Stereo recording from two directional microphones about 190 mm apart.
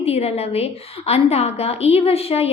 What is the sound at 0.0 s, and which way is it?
A woman's voice, 35° left (ahead or behind).